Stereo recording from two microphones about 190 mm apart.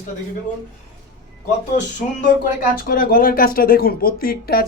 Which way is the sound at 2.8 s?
50° left (ahead or behind).